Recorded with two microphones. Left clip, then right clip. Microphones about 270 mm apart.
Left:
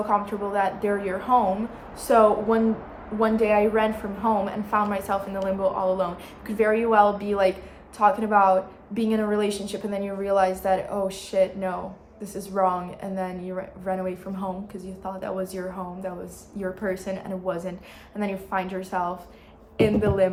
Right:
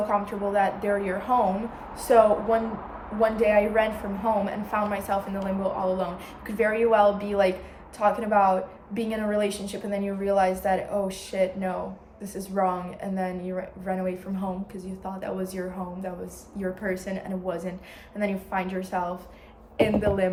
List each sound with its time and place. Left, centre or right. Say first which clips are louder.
0.1 s a woman's voice: left 1 dB; centre